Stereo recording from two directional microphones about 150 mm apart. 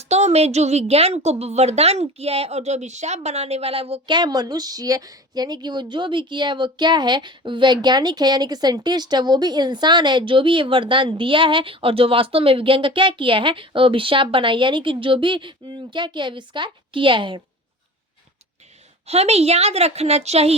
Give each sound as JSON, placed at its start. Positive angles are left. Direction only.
{"t": 0.0, "sound": "a woman's voice", "side_deg": -45}
{"t": 19.0, "sound": "a woman's voice", "side_deg": -45}